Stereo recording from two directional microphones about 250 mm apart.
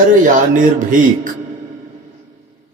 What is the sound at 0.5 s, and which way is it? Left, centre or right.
Speech, right.